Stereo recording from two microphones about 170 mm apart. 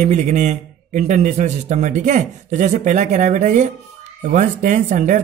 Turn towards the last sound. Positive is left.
turn(degrees=-45)  # may be behind; listen again after turning